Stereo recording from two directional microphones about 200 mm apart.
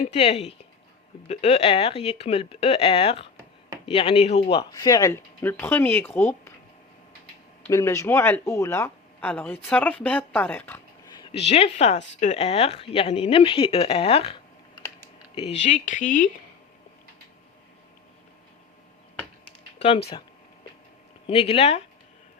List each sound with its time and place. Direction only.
0.0 s speech: 35° left (ahead or behind); by 6.5 s 10° left (ahead or behind)
7.6 s speech: 15° left (ahead or behind)
11.2 s speech: 30° left (ahead or behind)
15.4 s speech: 35° left (ahead or behind)
21.2 s speech: 30° left (ahead or behind)